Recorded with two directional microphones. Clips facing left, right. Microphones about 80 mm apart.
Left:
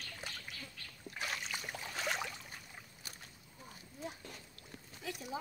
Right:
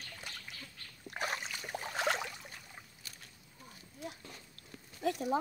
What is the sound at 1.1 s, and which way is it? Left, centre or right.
Boat, right.